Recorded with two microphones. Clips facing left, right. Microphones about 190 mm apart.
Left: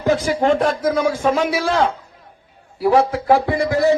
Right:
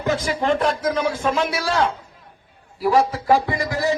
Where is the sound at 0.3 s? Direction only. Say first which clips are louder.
Left 4 dB; 45° left (ahead or behind).